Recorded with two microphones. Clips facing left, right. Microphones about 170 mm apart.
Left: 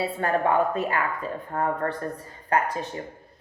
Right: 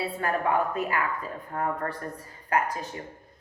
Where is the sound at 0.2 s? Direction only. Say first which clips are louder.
Left 4 dB; 30° left (ahead or behind).